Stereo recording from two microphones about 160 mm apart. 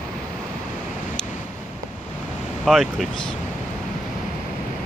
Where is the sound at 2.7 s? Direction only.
Centre (ahead or behind).